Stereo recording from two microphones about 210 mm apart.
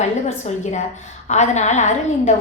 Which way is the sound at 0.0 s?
35° left (ahead or behind).